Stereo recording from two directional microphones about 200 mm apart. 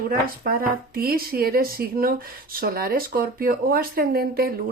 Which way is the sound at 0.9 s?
50° right (ahead or behind).